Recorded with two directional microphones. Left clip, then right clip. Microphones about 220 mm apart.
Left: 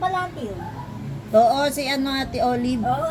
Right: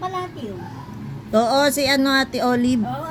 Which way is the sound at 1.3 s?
55° right (ahead or behind).